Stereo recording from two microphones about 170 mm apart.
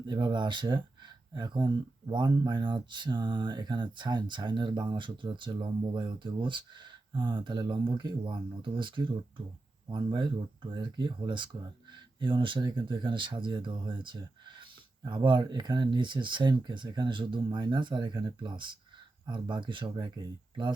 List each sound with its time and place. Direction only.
0.0 s speech: 25° right (ahead or behind)